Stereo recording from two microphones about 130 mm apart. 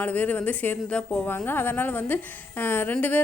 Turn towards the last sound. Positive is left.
turn(degrees=15)  # may be behind; listen again after turning